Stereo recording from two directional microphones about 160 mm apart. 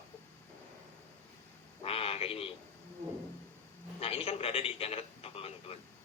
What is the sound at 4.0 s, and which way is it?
A man's voice, 40° left (ahead or behind).